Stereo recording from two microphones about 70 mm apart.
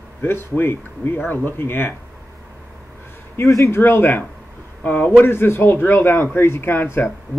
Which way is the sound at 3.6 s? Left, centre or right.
Left.